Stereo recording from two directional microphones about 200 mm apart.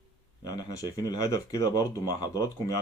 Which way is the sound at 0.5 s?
20° left (ahead or behind).